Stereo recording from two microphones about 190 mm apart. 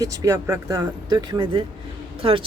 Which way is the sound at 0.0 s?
20° right (ahead or behind).